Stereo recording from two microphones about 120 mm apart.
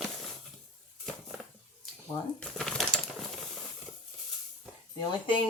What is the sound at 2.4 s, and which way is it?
Crumpling, 5° left (ahead or behind).